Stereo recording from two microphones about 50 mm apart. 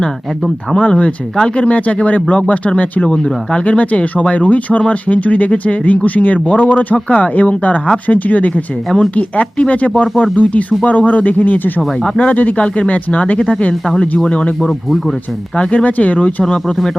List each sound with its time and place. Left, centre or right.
0.8 s speech: left
11.9 s speech: centre
12.3 s speech: left
14.6 s speech: centre
15.5 s speech: left
16.4 s speech: centre